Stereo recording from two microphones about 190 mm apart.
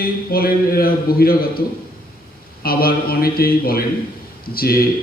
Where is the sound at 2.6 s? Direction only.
50° left (ahead or behind).